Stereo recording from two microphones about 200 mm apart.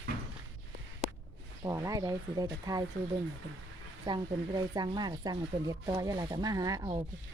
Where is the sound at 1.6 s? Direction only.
15° right (ahead or behind).